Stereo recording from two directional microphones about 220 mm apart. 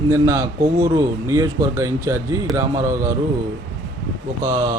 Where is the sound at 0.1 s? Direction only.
15° right (ahead or behind).